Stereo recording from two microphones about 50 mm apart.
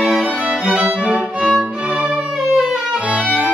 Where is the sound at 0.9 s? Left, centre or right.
Centre.